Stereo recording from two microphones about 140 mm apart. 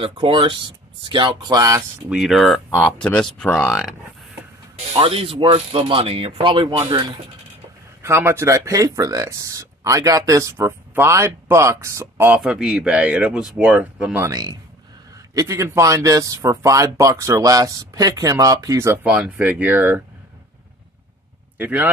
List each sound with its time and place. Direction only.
0.0 s speech: 40° right (ahead or behind)
2.0 s speech: 5° right (ahead or behind)
4.9 s speech: 40° right (ahead or behind)
8.0 s speech: 15° right (ahead or behind)
12.4 s speech: 5° right (ahead or behind)
14.2 s speech: 30° right (ahead or behind)
19.0 s speech: 10° right (ahead or behind)
21.5 s speech: 10° right (ahead or behind)